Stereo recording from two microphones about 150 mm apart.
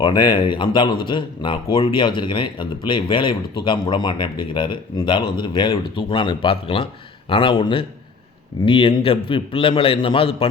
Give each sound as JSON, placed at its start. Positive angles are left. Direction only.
{"t": 0.0, "sound": "speech", "side_deg": 30}